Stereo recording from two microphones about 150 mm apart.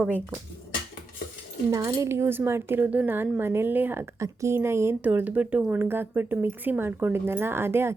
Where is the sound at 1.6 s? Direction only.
20° right (ahead or behind).